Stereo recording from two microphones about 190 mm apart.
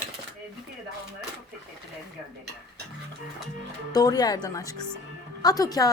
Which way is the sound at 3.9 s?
20° left (ahead or behind).